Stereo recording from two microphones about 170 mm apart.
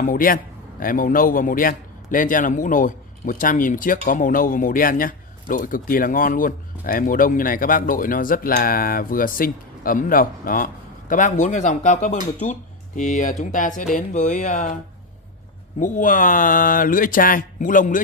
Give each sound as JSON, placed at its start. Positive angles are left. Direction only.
{"t": 0.0, "sound": "a man's voice", "side_deg": 55}
{"t": 15.8, "sound": "a man's voice", "side_deg": 50}